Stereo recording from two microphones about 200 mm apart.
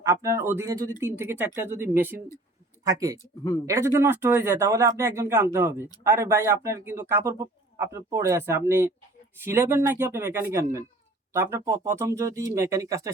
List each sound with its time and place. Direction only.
0.0 s speech: 15° right (ahead or behind)